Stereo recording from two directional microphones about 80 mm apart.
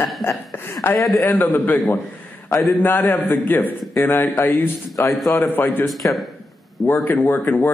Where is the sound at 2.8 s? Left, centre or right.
Left.